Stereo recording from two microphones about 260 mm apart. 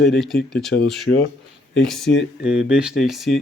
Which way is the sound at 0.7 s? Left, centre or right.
Left.